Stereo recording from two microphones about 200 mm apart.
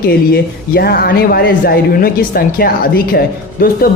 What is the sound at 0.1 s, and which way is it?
Speech, 50° left (ahead or behind).